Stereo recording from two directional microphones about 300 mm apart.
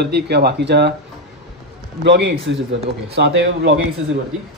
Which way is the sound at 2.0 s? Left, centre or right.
Right.